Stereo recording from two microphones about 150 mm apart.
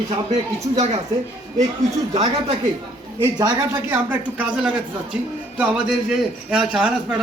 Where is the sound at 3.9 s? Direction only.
10° right (ahead or behind).